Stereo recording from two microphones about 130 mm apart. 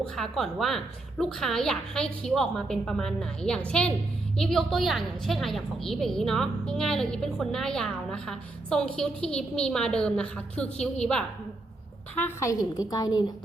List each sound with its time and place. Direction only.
0.2 s a woman's voice: centre (ahead or behind)
12.1 s a woman's voice: 20° left (ahead or behind)